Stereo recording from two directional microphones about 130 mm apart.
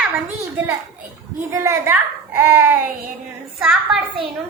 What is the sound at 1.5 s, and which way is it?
A woman's voice, 20° right (ahead or behind).